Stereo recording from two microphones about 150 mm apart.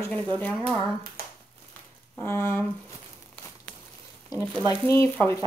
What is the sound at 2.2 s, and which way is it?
Speech, 15° left (ahead or behind).